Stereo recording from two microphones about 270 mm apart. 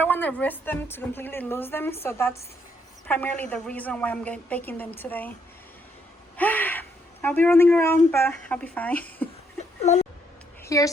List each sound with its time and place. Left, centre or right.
0.0 s a woman's voice: centre
6.3 s a woman's voice: centre
9.8 s speech: left
10.6 s a woman's voice: centre